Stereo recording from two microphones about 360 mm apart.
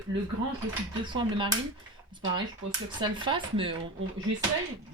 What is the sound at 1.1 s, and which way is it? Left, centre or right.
Speech, centre.